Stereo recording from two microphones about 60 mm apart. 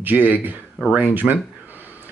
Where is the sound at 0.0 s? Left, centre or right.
Right.